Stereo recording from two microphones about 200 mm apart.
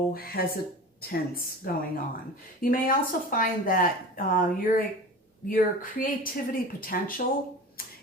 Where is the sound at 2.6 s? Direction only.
45° left (ahead or behind).